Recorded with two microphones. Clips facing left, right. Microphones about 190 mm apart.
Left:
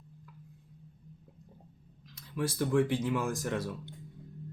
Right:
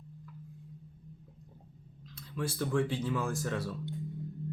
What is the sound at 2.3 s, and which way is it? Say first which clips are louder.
Speech: left 3 dB; 15° left (ahead or behind).